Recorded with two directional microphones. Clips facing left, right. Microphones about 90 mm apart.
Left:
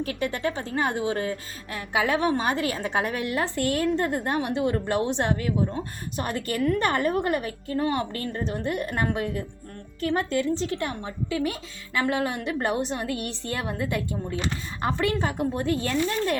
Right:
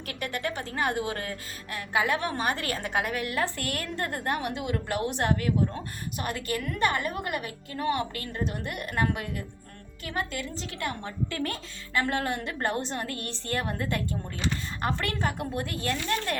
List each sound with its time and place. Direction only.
0.0 s a woman's voice: 25° left (ahead or behind)
2.9 s a woman's voice: 30° left (ahead or behind)
11.0 s a woman's voice: 10° left (ahead or behind)